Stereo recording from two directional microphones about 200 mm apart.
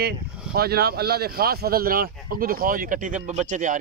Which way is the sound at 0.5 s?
50° right (ahead or behind).